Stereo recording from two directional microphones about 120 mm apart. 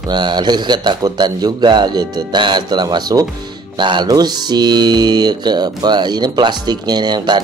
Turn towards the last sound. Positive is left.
turn(degrees=-35)  # may be behind; listen again after turning